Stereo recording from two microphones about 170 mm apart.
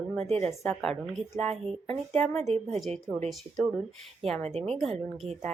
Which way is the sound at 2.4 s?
40° right (ahead or behind).